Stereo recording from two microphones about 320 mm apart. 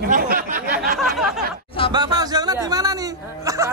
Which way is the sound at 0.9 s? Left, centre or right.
Centre.